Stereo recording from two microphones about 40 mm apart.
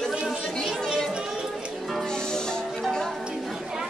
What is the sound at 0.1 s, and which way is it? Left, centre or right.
Chatter, centre.